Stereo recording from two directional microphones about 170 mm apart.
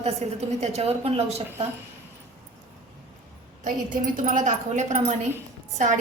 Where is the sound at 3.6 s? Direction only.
50° right (ahead or behind).